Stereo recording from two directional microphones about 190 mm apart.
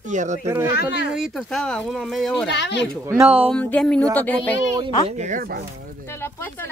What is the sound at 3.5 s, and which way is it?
Speech, 5° left (ahead or behind).